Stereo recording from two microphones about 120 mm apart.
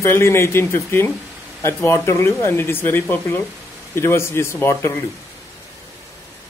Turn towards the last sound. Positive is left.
turn(degrees=25)  # may be behind; listen again after turning